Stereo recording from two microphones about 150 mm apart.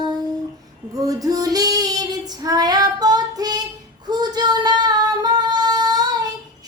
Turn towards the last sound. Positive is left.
turn(degrees=-25)  # may be behind; listen again after turning